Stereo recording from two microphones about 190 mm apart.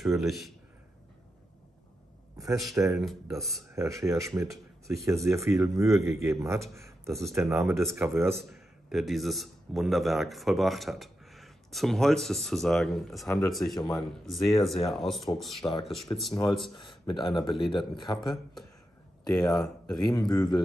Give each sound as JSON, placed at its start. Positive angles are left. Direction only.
{"t": 0.0, "sound": "speech", "side_deg": 0}
{"t": 2.4, "sound": "speech", "side_deg": 0}
{"t": 2.7, "sound": "speech", "side_deg": -15}
{"t": 3.0, "sound": "speech", "side_deg": 0}
{"t": 3.7, "sound": "speech", "side_deg": -15}
{"t": 8.4, "sound": "speech", "side_deg": 0}
{"t": 16.1, "sound": "a man's voice", "side_deg": 20}
{"t": 18.2, "sound": "speech", "side_deg": 0}
{"t": 20.2, "sound": "speech", "side_deg": 20}